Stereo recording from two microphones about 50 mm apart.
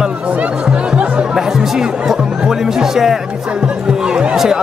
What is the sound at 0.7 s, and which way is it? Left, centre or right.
Music, right.